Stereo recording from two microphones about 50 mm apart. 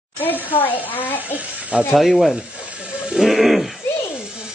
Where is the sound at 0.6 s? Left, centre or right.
Left.